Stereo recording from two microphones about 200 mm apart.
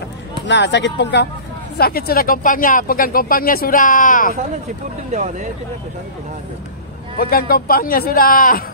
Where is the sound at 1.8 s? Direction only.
50° left (ahead or behind).